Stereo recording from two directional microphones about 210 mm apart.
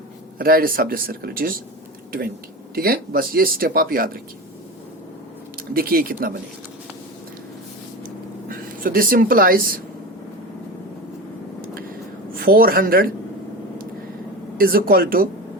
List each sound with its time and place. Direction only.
0.3 s speech: 45° right (ahead or behind)
2.7 s speech: 45° right (ahead or behind)
5.7 s speech: 45° right (ahead or behind)
8.4 s speech: 40° right (ahead or behind)
12.4 s speech: 45° right (ahead or behind)
14.6 s speech: 45° right (ahead or behind)